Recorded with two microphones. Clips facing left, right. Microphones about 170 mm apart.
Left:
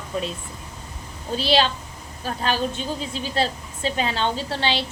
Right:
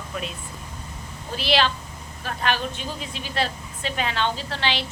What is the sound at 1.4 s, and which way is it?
A woman's voice, 30° left (ahead or behind).